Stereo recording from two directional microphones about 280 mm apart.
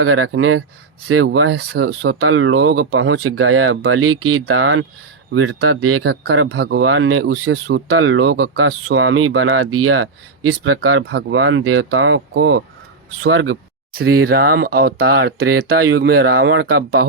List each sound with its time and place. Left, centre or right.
0.0 s speech: right
10.8 s speech: right
14.0 s speech: right